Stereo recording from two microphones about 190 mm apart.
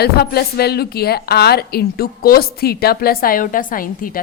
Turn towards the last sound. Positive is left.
turn(degrees=45)  # may be behind; listen again after turning